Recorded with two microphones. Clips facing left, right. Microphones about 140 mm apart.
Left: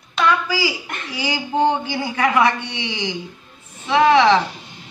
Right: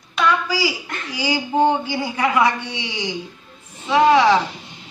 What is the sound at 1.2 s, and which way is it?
A woman's voice, 15° right (ahead or behind).